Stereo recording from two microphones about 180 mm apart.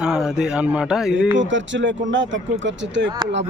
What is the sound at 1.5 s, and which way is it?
Speech, 90° right.